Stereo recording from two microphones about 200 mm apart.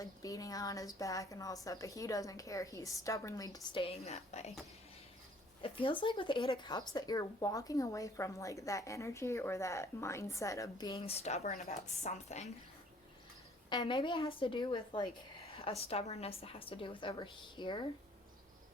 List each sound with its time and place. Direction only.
0.0 s speech: 15° left (ahead or behind); by 4.5 s 35° left (ahead or behind)
5.6 s speech: 25° left (ahead or behind)
13.7 s a woman's voice: 25° left (ahead or behind)